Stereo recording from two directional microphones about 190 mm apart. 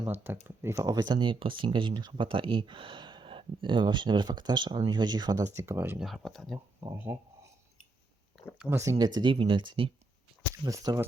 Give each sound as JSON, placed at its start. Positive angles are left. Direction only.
{"t": 0.0, "sound": "speech", "side_deg": -10}
{"t": 6.1, "sound": "speech", "side_deg": 0}
{"t": 6.9, "sound": "speech", "side_deg": -10}
{"t": 8.5, "sound": "speech", "side_deg": -15}